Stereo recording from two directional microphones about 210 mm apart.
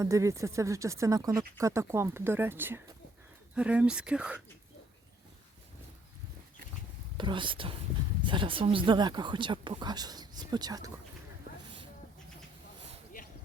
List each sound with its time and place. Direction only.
0.0 s speech: 15° right (ahead or behind)
7.2 s speech: 25° right (ahead or behind)